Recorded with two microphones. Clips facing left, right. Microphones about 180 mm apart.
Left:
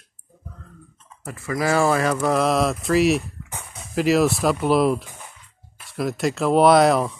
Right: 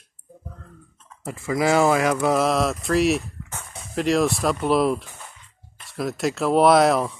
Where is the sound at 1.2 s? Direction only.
20° right (ahead or behind).